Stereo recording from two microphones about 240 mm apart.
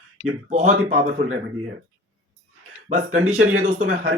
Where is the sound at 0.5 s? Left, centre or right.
Right.